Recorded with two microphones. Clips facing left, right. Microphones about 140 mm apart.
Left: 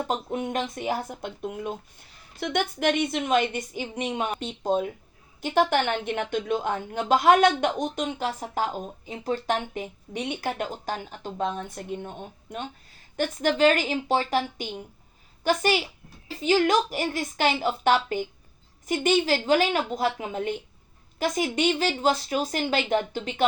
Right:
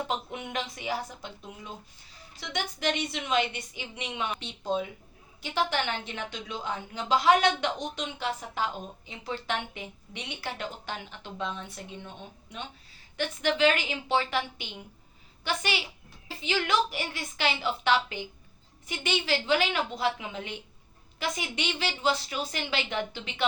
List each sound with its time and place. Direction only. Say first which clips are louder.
0.1 s a woman's voice: left 5 dB; 40° left (ahead or behind)